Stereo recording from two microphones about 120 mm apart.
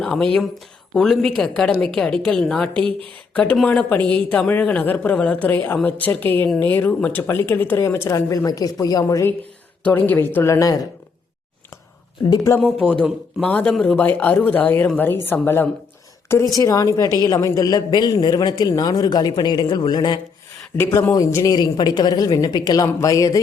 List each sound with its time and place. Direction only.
0.0 s a woman's voice: 5° left (ahead or behind)
2.8 s speech: 45° right (ahead or behind)
3.3 s speech: 10° left (ahead or behind); by 9.3 s 30° left (ahead or behind)
9.8 s speech: 15° left (ahead or behind)
12.5 s speech: 10° left (ahead or behind)
16.6 s a man's voice: 30° left (ahead or behind)
20.7 s a man's voice: 20° left (ahead or behind)